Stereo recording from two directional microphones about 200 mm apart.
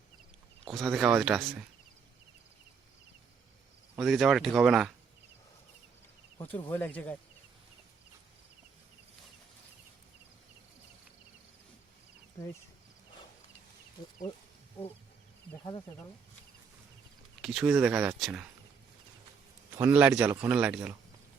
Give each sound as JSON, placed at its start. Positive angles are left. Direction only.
{"t": 0.7, "sound": "speech", "side_deg": 0}
{"t": 3.9, "sound": "speech", "side_deg": 0}
{"t": 6.7, "sound": "speech", "side_deg": 10}
{"t": 12.4, "sound": "speech", "side_deg": 15}
{"t": 17.4, "sound": "speech", "side_deg": -5}
{"t": 19.7, "sound": "a man's voice", "side_deg": -10}